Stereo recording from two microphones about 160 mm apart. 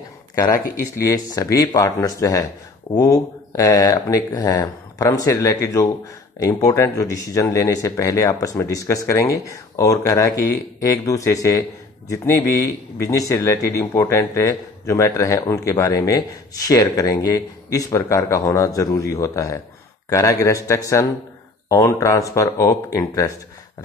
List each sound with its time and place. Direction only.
0.9 s a man's voice: 20° left (ahead or behind)